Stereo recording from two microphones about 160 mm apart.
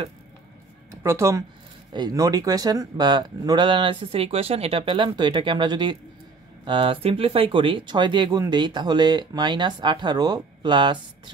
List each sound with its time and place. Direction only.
1.0 s speech: 20° right (ahead or behind)